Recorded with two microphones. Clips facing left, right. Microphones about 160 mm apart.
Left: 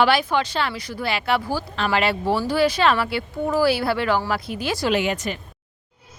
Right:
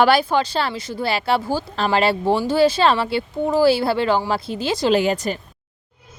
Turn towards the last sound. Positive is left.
turn(degrees=-35)  # may be behind; listen again after turning